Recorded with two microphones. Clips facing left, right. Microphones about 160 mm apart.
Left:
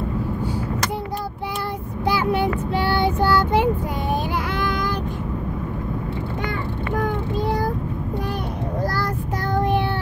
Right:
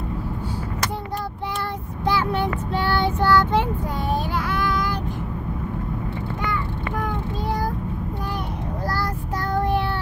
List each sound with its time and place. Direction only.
2.0 s child singing: 10° left (ahead or behind)